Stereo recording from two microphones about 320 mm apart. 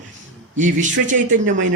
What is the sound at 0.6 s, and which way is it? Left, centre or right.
Speech, right.